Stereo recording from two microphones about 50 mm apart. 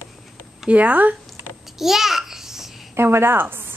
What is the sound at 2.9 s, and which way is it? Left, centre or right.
Speech, right.